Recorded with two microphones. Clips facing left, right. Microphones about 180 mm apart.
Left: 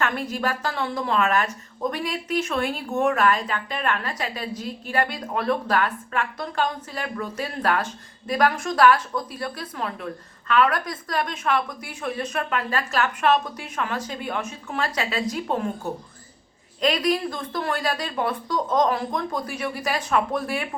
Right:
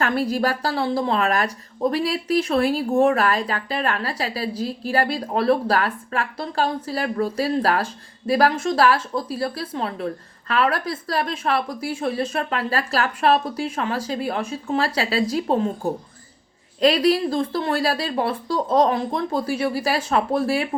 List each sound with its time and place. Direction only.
0.0 s a woman's voice: 35° right (ahead or behind)